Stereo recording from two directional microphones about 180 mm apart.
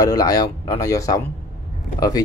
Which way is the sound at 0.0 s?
20° left (ahead or behind).